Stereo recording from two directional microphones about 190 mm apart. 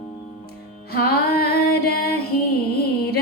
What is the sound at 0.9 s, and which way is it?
Music, 55° left (ahead or behind).